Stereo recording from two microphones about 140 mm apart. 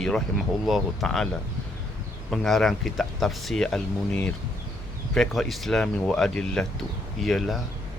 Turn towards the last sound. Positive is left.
turn(degrees=0)  # may be behind; listen again after turning